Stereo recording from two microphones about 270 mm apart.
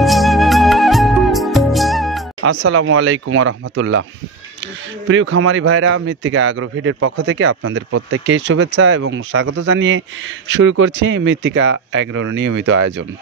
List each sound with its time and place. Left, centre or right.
0.0 s music: centre
2.4 s a man's voice: right
5.0 s a man's voice: right